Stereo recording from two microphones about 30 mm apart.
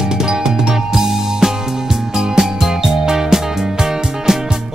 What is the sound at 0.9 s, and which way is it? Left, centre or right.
Music, centre.